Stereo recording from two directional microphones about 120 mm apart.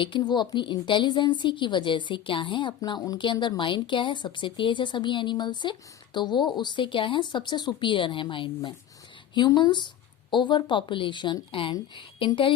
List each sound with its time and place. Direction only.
0.0 s a woman's voice: 40° left (ahead or behind)